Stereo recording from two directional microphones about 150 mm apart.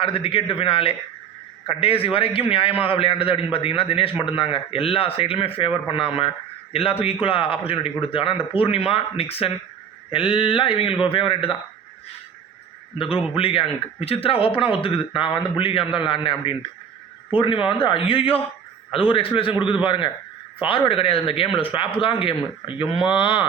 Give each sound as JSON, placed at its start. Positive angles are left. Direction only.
{"t": 0.0, "sound": "a man's voice", "side_deg": 35}
{"t": 13.3, "sound": "a man's voice", "side_deg": 35}